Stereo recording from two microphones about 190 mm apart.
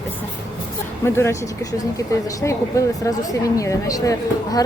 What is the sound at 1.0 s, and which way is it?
Speech, 15° left (ahead or behind).